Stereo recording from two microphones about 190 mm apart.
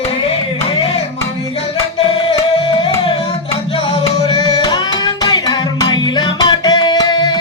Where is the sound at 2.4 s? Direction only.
25° left (ahead or behind).